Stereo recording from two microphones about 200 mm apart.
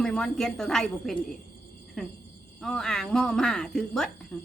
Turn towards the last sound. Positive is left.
turn(degrees=0)  # may be behind; listen again after turning